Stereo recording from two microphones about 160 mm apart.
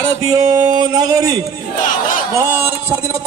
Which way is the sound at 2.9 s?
20° right (ahead or behind).